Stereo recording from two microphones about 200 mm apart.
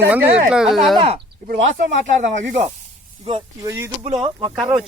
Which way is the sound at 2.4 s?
35° right (ahead or behind).